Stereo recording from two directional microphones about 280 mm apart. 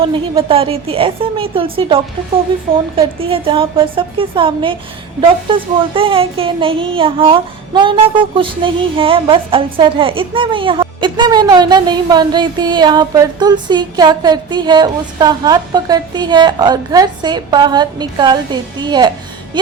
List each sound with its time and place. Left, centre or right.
0.0 s a woman's voice: centre